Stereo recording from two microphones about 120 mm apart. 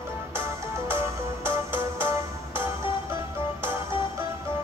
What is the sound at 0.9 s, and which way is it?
Music, 20° right (ahead or behind).